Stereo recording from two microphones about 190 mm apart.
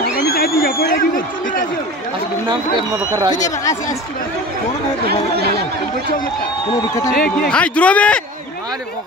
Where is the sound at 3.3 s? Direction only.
15° left (ahead or behind).